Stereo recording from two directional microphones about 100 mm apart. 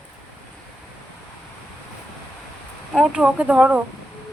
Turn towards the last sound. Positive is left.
turn(degrees=-15)  # may be behind; listen again after turning